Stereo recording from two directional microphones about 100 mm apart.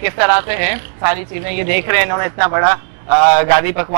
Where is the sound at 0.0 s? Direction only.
15° right (ahead or behind).